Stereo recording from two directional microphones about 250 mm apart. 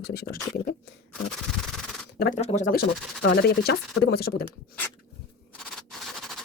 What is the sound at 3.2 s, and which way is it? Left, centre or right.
A woman's voice, left.